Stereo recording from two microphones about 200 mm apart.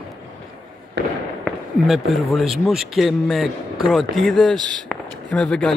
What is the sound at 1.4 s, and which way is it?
Speech, centre (ahead or behind).